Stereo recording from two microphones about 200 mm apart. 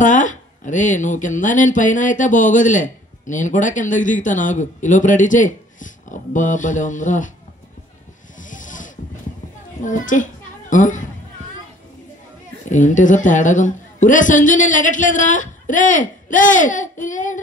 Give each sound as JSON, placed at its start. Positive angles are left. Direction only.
{"t": 0.0, "sound": "speech", "side_deg": 40}
{"t": 8.4, "sound": "a sound", "side_deg": 40}
{"t": 9.8, "sound": "a child's voice", "side_deg": 40}
{"t": 12.6, "sound": "speech", "side_deg": 40}